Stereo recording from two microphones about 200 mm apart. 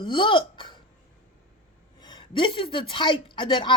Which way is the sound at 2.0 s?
20° left (ahead or behind).